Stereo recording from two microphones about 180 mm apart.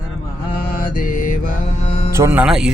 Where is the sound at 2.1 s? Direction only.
15° right (ahead or behind).